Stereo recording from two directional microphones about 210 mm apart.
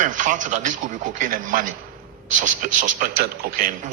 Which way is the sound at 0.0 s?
35° right (ahead or behind).